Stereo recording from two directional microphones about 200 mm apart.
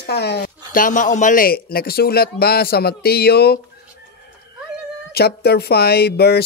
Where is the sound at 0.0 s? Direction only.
55° left (ahead or behind).